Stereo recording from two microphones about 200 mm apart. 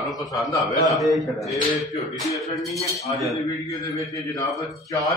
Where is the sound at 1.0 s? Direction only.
Centre (ahead or behind).